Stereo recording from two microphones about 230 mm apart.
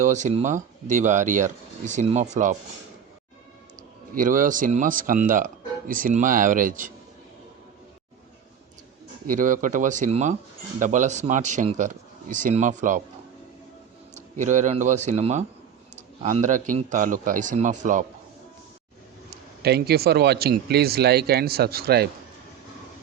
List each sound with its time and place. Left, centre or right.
0.0 s speech: right
4.1 s speech: right
9.2 s speech: right
14.2 s speech: right
19.3 s speech: right